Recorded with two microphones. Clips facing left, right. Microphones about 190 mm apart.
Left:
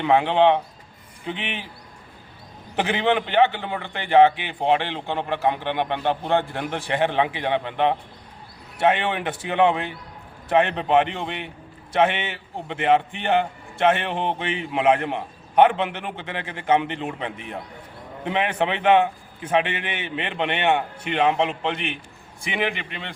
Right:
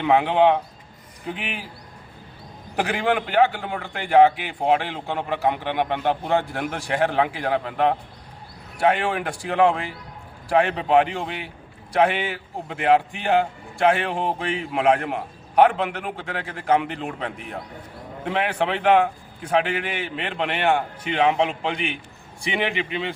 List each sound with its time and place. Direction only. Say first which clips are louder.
0.3 s a man's voice: even; centre (ahead or behind)
2.7 s a man's voice: left 1 dB; 5° right (ahead or behind)